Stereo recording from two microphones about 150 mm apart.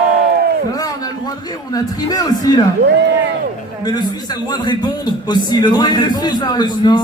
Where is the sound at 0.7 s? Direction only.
25° left (ahead or behind).